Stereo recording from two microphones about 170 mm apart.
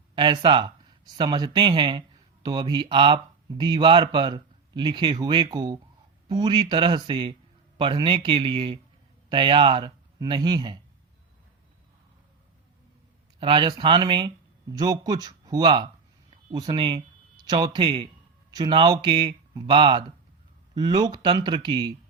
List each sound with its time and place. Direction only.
0.2 s speech: 25° right (ahead or behind)
13.4 s speech: 30° right (ahead or behind)